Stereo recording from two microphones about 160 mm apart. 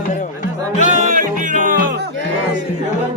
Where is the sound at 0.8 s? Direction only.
55° right (ahead or behind).